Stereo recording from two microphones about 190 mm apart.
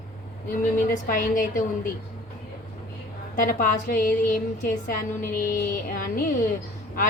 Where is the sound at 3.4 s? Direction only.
50° left (ahead or behind).